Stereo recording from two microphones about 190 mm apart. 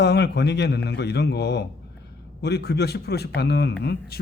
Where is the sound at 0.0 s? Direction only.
60° left (ahead or behind).